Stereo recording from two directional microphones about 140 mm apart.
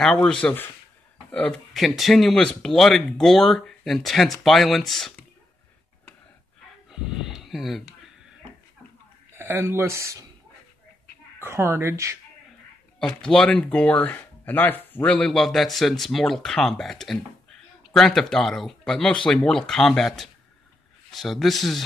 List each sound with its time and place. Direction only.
0.0 s speech: 5° left (ahead or behind)
6.9 s a sound: 5° right (ahead or behind)
9.3 s speech: 15° right (ahead or behind)
11.3 s speech: 20° right (ahead or behind)
13.0 s speech: 5° left (ahead or behind)